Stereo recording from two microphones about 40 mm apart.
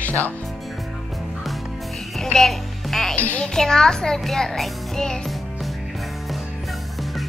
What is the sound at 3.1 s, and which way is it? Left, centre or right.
Speech, left.